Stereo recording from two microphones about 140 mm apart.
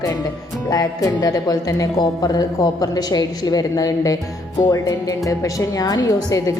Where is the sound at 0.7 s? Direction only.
25° left (ahead or behind).